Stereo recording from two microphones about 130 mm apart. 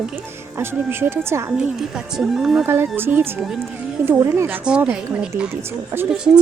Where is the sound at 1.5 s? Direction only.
5° right (ahead or behind).